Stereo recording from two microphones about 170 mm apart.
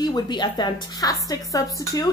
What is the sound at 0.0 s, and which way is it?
A woman's voice, 25° left (ahead or behind).